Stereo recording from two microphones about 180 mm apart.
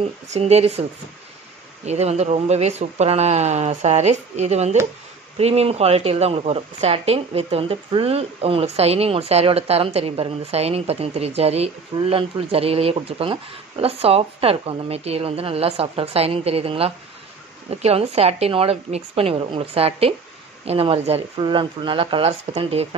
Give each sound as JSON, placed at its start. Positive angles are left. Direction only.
{"t": 0.0, "sound": "a woman's voice", "side_deg": -35}
{"t": 1.9, "sound": "a woman's voice", "side_deg": -35}